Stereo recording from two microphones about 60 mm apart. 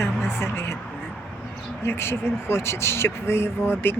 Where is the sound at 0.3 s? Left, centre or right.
Left.